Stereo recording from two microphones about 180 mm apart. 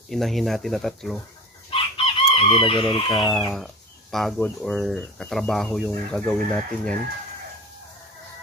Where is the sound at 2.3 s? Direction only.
30° left (ahead or behind).